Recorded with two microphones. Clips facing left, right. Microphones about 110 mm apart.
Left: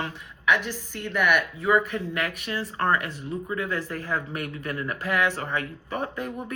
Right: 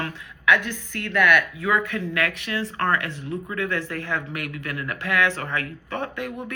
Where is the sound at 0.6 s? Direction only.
60° right (ahead or behind).